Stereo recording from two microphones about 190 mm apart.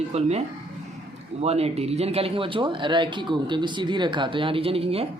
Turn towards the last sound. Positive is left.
turn(degrees=-30)  # may be behind; listen again after turning